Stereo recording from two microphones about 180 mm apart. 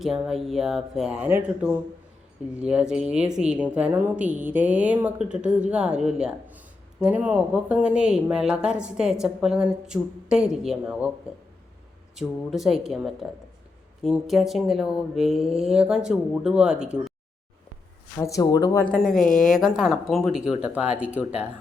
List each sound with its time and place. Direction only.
0.0 s a woman's voice: centre (ahead or behind)
12.1 s a woman's voice: centre (ahead or behind)
18.2 s speech: 20° left (ahead or behind)
18.9 s a woman's voice: 5° left (ahead or behind)